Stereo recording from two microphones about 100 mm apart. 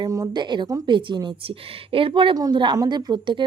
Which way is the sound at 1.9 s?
65° right (ahead or behind).